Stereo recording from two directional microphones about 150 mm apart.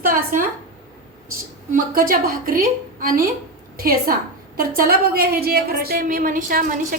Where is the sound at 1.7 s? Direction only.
70° right (ahead or behind).